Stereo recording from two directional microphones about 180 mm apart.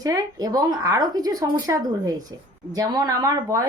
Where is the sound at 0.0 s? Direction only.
20° right (ahead or behind).